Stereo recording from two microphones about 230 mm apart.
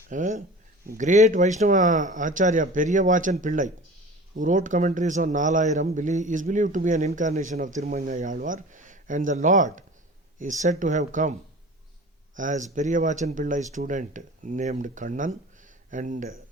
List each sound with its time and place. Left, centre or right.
0.1 s speech: right
12.4 s speech: right